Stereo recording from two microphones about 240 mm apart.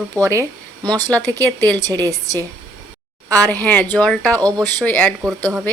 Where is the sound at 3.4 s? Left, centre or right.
Centre.